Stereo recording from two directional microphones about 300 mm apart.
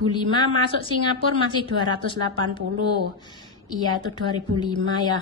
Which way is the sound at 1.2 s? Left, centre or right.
Centre.